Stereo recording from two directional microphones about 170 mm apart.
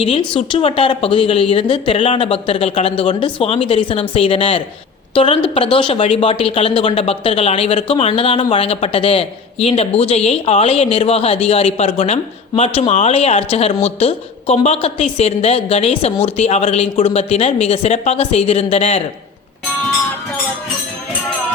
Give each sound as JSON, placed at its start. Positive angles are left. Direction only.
{"t": 0.0, "sound": "a woman's voice", "side_deg": 35}